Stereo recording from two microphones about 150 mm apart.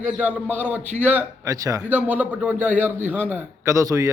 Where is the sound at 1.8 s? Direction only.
10° right (ahead or behind).